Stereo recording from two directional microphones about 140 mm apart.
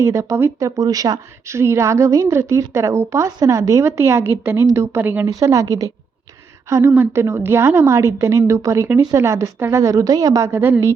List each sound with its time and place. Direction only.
0.0 s a woman's voice: 20° right (ahead or behind)